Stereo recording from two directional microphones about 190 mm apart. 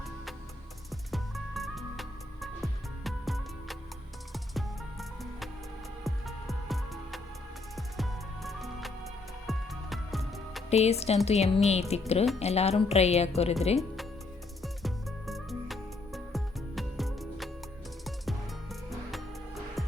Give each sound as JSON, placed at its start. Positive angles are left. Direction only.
{"t": 0.9, "sound": "music", "side_deg": 0}
{"t": 10.7, "sound": "speech", "side_deg": 35}
{"t": 13.7, "sound": "music", "side_deg": 0}